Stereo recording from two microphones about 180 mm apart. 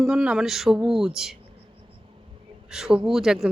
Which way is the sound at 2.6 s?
5° right (ahead or behind).